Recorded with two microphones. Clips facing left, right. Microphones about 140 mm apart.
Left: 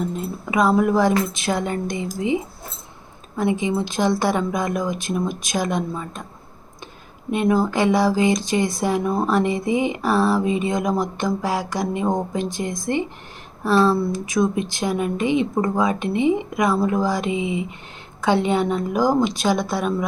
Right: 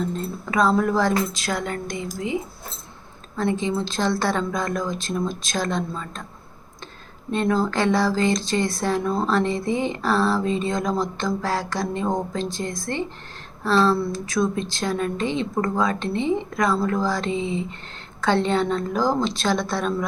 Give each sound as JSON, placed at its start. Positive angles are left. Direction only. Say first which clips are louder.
{"t": 0.0, "sound": "speech", "louder": "left 1 dB", "side_deg": 10}
{"t": 7.3, "sound": "speech", "louder": "left 3 dB", "side_deg": 15}